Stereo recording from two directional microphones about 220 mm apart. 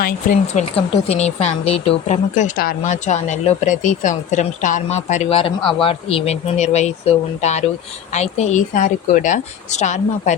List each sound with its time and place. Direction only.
0.4 s a woman's voice: 25° left (ahead or behind)